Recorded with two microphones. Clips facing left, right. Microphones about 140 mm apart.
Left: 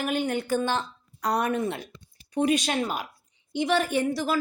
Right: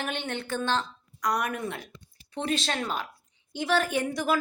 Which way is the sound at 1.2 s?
30° left (ahead or behind).